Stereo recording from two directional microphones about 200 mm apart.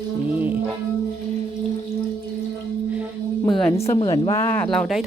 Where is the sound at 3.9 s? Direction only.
25° left (ahead or behind); by 5.0 s centre (ahead or behind).